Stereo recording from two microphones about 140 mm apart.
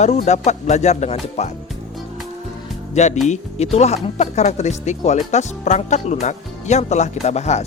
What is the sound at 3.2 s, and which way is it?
Speech, 50° left (ahead or behind).